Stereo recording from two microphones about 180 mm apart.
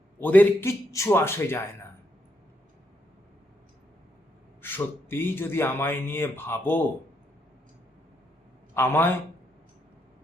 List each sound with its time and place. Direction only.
0.2 s speech: 10° left (ahead or behind)
4.6 s speech: 10° left (ahead or behind)
8.7 s a man's voice: 10° left (ahead or behind)